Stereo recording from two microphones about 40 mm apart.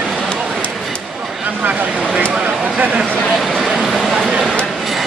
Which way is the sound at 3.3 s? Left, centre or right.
Centre.